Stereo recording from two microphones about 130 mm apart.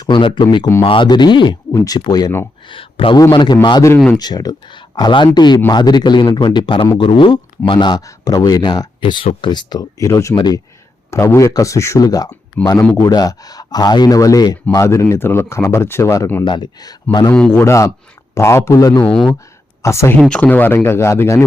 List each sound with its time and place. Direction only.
0.0 s speech: 40° left (ahead or behind)
2.6 s speech: 40° left (ahead or behind)
3.9 s speech: 10° left (ahead or behind)
4.2 s speech: 30° left (ahead or behind)
11.1 s speech: 20° left (ahead or behind)
16.4 s speech: 35° left (ahead or behind)
17.5 s speech: 20° left (ahead or behind)
19.1 s speech: 5° left (ahead or behind)
19.8 s speech: 20° left (ahead or behind)
20.1 s speech: 10° left (ahead or behind)